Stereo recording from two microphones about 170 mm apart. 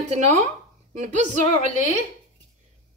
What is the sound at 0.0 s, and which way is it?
A woman's voice, 45° right (ahead or behind).